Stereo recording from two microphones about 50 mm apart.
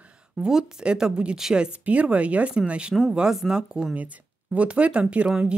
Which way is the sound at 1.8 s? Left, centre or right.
Right.